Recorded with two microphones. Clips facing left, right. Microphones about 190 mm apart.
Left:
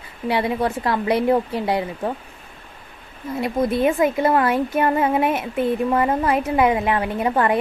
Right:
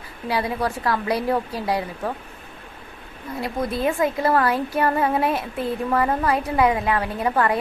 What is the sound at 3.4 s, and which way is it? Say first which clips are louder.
A child's voice: left 4 dB; 20° left (ahead or behind).